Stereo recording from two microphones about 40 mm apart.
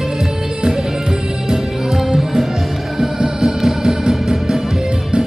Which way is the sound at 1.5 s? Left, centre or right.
Centre.